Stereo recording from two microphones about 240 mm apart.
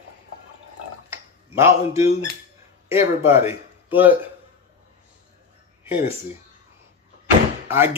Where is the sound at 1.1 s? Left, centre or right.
Centre.